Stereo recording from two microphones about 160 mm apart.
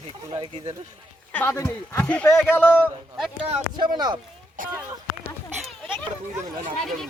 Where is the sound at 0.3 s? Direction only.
30° right (ahead or behind).